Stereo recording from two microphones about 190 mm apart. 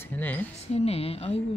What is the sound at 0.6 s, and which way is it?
Speech, 30° left (ahead or behind).